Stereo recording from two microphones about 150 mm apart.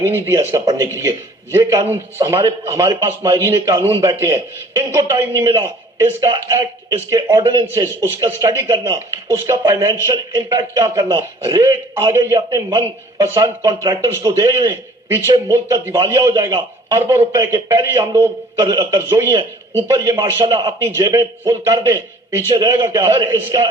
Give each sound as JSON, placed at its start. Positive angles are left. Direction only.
{"t": 0.0, "sound": "a man's voice", "side_deg": -15}